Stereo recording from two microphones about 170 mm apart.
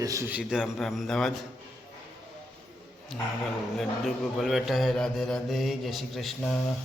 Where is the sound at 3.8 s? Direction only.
Centre (ahead or behind).